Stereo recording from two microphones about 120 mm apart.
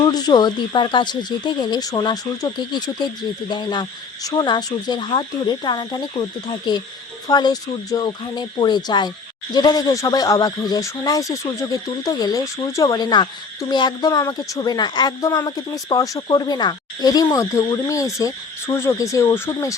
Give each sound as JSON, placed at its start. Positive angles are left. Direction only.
{"t": 0.0, "sound": "speech", "side_deg": 35}